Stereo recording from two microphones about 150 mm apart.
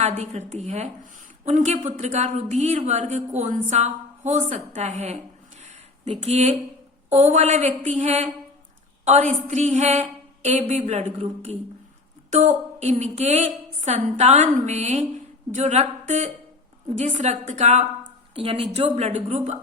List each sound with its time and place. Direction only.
0.0 s a woman's voice: 50° right (ahead or behind)
18.3 s a woman's voice: 40° right (ahead or behind)